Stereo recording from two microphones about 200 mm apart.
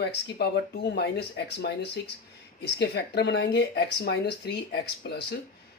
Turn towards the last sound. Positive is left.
turn(degrees=55)  # may be behind; listen again after turning